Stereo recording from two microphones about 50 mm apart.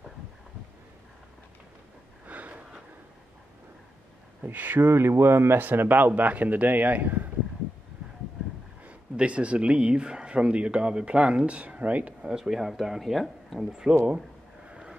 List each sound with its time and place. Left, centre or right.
2.2 s a sound: right
4.4 s speech: right
4.9 s speech: right
5.6 s speech: right
8.8 s speech: right
12.3 s speech: centre